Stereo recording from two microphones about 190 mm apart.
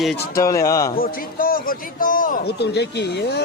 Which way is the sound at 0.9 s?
50° left (ahead or behind).